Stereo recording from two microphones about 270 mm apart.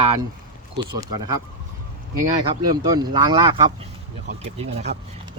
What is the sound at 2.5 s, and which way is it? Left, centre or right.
Speech, centre.